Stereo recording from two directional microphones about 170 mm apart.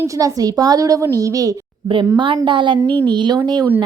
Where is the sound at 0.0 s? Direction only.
20° right (ahead or behind).